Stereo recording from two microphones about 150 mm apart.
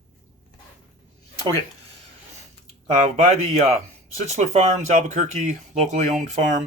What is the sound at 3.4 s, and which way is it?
A man's voice, 40° right (ahead or behind).